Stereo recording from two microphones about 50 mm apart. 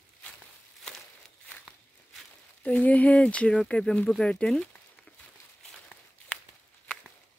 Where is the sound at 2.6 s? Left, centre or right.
Left.